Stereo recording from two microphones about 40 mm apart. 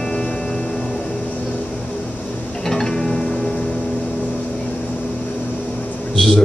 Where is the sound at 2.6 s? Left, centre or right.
Centre.